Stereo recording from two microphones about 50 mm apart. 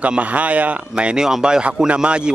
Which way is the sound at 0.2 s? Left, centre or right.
Right.